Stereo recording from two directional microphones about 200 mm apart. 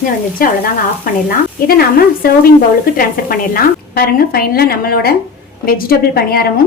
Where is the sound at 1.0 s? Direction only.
45° left (ahead or behind).